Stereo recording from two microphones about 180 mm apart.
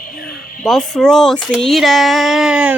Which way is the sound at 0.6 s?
Centre (ahead or behind).